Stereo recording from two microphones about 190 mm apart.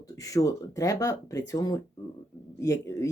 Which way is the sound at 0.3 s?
15° left (ahead or behind).